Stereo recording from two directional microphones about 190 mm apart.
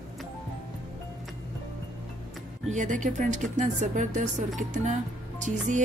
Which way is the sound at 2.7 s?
40° right (ahead or behind).